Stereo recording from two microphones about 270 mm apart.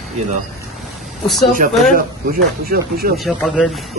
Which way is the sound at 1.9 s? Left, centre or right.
Right.